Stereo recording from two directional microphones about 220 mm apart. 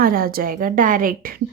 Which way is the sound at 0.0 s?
40° right (ahead or behind).